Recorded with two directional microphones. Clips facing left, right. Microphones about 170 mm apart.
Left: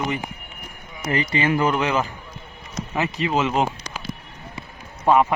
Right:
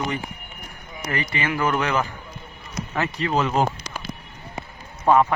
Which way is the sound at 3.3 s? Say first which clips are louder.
Even; 5° left (ahead or behind).